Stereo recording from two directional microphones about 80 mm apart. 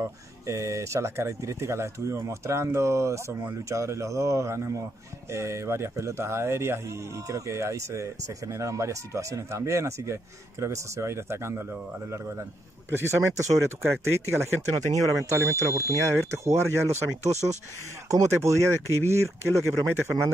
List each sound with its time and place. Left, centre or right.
0.0 s speech: right
12.9 s speech: right